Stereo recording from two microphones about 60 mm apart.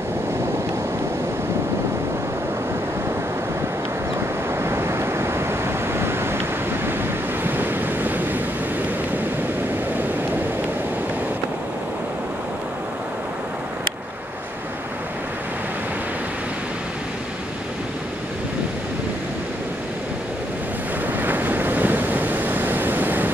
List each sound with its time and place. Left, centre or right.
4.6 s waves: right
7.4 s waves: right
9.9 s waves: right
21.2 s waves: right